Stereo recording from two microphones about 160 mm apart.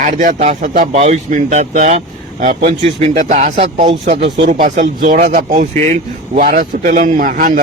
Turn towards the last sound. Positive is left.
turn(degrees=-60)  # may be behind; listen again after turning